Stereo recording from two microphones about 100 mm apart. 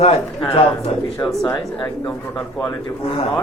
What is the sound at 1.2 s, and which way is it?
Speech, 40° left (ahead or behind).